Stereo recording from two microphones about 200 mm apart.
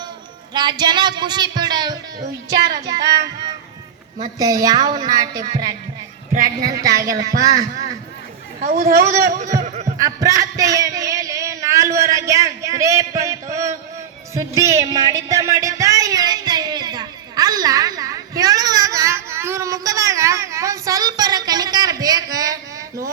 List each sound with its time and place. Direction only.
0.5 s a woman's voice: 20° right (ahead or behind)
4.2 s a woman's voice: 20° right (ahead or behind)
6.3 s speech: 40° right (ahead or behind)
6.8 s speech: 15° right (ahead or behind)
8.6 s speech: 45° right (ahead or behind)
9.6 s a sound: 35° right (ahead or behind)
10.0 s speech: 15° right (ahead or behind)
15.3 s a sound: 15° right (ahead or behind)